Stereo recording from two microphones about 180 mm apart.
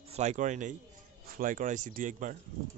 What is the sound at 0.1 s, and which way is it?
Speech, 40° right (ahead or behind).